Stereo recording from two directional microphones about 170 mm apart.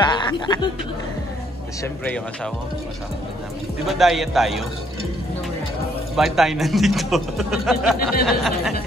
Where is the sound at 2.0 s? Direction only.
5° left (ahead or behind).